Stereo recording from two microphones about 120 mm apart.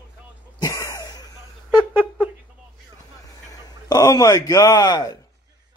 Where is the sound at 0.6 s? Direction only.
30° left (ahead or behind).